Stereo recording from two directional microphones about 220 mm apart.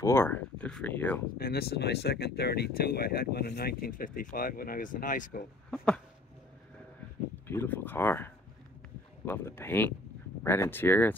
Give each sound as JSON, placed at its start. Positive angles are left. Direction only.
{"t": 0.0, "sound": "speech", "side_deg": 10}
{"t": 1.4, "sound": "speech", "side_deg": 45}
{"t": 7.4, "sound": "speech", "side_deg": 10}